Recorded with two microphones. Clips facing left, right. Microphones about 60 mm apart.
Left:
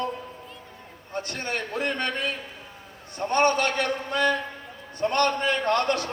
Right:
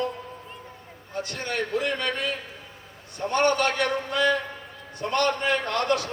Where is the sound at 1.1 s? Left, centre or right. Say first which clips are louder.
Even; left.